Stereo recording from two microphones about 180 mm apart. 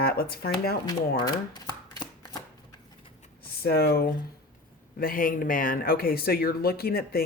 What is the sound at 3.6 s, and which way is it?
Speech, 60° left (ahead or behind).